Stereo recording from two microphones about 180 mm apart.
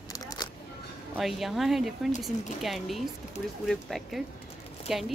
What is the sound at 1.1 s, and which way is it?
A woman's voice, centre (ahead or behind).